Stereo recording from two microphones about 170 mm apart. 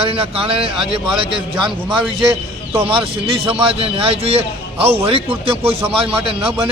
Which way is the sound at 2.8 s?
30° right (ahead or behind).